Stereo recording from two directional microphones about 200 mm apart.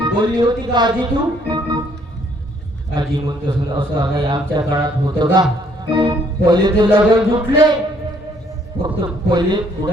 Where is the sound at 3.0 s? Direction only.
20° right (ahead or behind).